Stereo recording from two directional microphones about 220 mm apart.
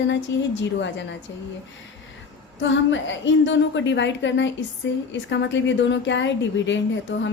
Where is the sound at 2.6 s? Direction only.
55° left (ahead or behind).